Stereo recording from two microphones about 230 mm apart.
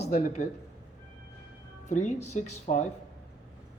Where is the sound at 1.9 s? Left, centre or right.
Left.